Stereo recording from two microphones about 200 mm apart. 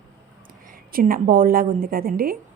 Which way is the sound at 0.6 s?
45° right (ahead or behind).